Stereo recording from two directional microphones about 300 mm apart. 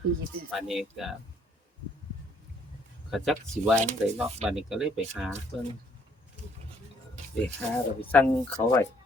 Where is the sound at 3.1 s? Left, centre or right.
Centre.